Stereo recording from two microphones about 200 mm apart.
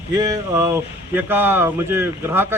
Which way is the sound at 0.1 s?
15° right (ahead or behind).